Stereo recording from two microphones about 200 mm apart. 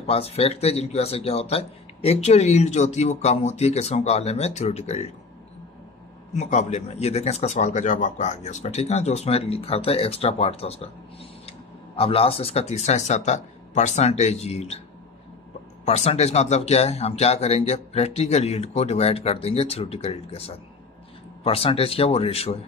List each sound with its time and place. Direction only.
0.0 s speech: 30° left (ahead or behind)
6.3 s speech: 35° left (ahead or behind)
15.8 s speech: 35° left (ahead or behind)